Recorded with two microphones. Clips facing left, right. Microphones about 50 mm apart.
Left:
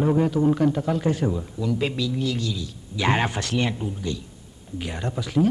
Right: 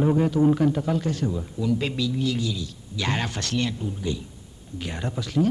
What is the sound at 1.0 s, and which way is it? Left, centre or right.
Speech, left.